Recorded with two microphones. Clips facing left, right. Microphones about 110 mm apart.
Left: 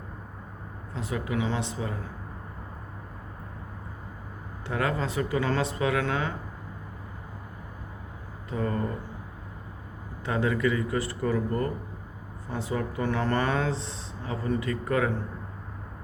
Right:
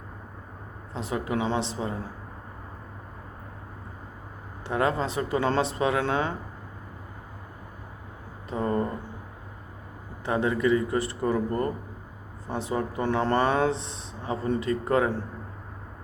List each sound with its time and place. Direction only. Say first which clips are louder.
0.9 s speech: right 2 dB; 25° right (ahead or behind)
4.6 s speech: right 3 dB; 25° right (ahead or behind)
8.4 s speech: right 3 dB; 25° right (ahead or behind)
10.2 s speech: right 2 dB; 25° right (ahead or behind)